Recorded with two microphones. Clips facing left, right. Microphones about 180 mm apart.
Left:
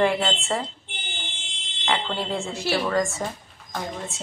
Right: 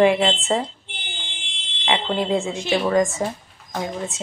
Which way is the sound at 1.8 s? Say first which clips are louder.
Right 5 dB; 15° right (ahead or behind).